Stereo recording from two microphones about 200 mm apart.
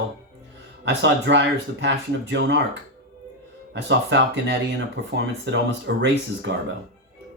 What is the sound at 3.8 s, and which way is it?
Speech, 60° right (ahead or behind).